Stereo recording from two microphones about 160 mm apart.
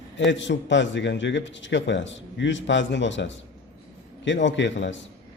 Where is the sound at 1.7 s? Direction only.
90° left.